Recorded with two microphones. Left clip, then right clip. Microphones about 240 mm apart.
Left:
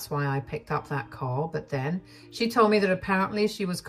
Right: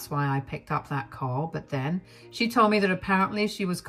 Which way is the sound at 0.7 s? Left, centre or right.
Right.